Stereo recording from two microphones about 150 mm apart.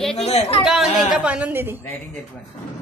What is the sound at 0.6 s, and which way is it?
Speech, centre (ahead or behind).